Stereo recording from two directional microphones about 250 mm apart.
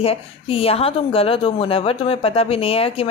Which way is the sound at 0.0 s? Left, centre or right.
Left.